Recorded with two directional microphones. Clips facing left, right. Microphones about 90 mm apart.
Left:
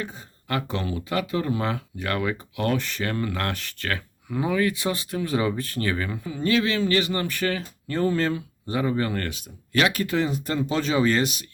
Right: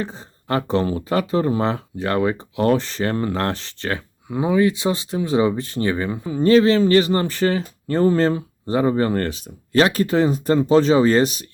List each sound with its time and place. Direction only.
0.0 s speech: 30° right (ahead or behind)